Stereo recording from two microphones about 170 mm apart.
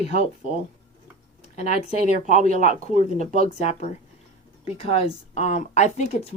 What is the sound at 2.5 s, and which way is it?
A woman's voice, 40° left (ahead or behind).